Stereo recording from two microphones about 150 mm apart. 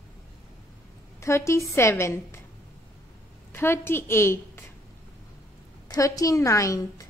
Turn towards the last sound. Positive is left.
turn(degrees=20)  # may be behind; listen again after turning